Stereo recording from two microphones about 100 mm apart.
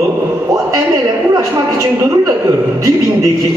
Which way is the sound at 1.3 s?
30° right (ahead or behind).